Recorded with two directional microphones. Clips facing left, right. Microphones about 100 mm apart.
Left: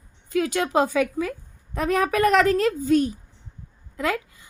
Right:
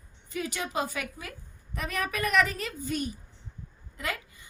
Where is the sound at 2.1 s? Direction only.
90° left.